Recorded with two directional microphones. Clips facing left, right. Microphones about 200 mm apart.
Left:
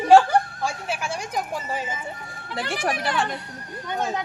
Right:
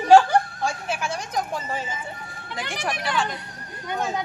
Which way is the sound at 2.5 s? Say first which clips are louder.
Left 3 dB; 40° left (ahead or behind).